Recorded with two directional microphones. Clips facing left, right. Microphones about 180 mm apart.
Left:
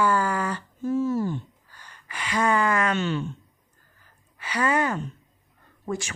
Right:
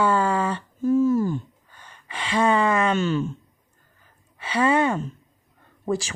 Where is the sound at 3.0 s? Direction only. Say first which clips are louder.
Right 4 dB; 45° right (ahead or behind).